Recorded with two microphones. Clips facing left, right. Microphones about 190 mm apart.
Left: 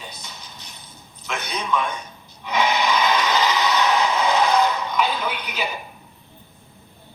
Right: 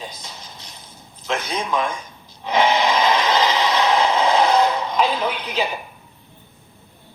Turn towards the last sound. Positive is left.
turn(degrees=-30)  # may be behind; listen again after turning